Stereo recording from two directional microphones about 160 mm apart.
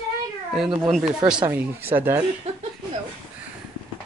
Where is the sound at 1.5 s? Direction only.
15° right (ahead or behind).